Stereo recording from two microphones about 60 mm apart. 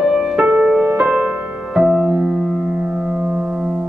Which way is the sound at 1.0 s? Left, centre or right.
Centre.